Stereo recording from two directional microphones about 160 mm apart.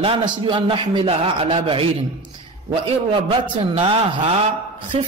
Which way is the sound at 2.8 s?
35° right (ahead or behind).